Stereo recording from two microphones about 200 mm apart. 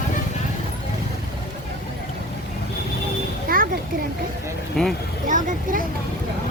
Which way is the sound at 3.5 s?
45° right (ahead or behind).